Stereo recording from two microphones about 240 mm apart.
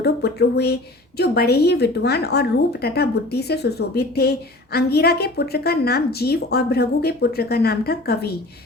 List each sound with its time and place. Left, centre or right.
0.0 s speech: left